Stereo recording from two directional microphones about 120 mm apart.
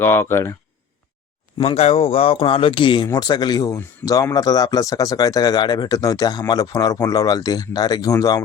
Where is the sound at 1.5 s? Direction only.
55° left (ahead or behind).